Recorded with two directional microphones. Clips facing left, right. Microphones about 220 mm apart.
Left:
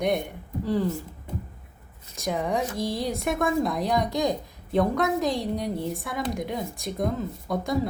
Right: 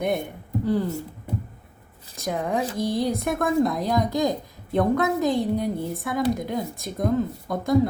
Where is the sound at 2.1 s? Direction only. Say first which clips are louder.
Right 1 dB; centre (ahead or behind).